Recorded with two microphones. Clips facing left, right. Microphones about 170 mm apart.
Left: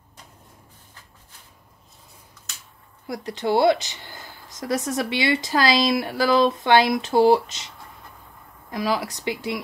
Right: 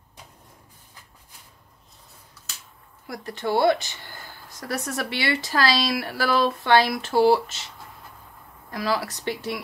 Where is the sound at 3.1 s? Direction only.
20° left (ahead or behind).